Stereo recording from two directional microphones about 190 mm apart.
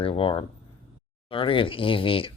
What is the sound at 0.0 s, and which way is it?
Speech, 30° left (ahead or behind).